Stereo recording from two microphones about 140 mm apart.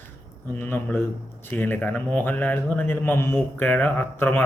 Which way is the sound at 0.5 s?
10° left (ahead or behind).